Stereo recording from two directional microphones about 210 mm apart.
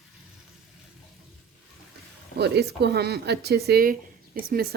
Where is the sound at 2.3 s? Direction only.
50° right (ahead or behind).